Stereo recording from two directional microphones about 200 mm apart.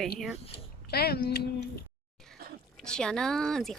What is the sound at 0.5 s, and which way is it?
Speech, 55° left (ahead or behind).